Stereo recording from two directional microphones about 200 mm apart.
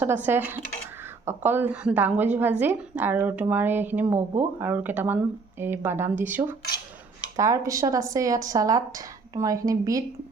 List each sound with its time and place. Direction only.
0.3 s speech: 10° right (ahead or behind)